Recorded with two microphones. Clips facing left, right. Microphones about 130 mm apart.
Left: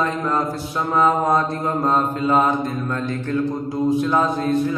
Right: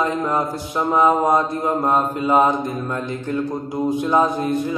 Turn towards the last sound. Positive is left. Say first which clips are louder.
# left 1 dB
turn(degrees=-15)  # may be behind; listen again after turning